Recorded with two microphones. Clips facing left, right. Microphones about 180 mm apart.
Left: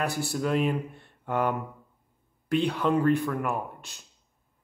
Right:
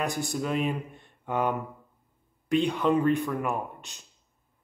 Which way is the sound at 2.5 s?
15° right (ahead or behind).